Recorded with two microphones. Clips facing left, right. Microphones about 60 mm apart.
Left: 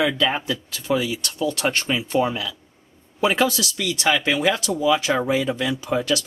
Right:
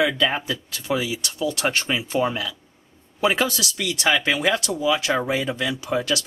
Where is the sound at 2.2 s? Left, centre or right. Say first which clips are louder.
Even; centre.